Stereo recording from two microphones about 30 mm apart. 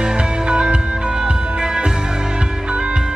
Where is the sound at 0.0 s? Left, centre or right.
Right.